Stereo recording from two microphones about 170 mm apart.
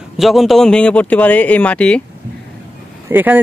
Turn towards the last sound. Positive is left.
turn(degrees=-10)  # may be behind; listen again after turning